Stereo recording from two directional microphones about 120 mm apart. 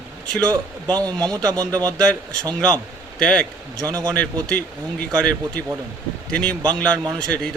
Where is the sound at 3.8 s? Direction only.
35° right (ahead or behind).